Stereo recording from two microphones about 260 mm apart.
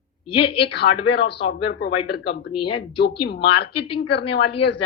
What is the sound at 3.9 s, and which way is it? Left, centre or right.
Speech, left.